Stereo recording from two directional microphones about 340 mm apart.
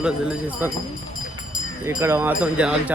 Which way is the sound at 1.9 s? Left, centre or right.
Centre.